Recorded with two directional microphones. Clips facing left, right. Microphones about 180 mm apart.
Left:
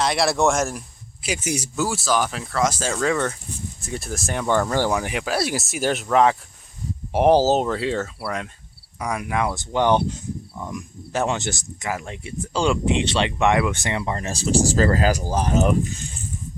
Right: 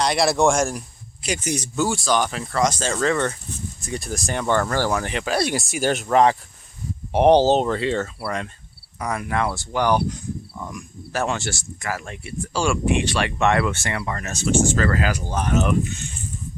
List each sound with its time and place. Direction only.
0.0 s speech: centre (ahead or behind); by 15.9 s 35° left (ahead or behind)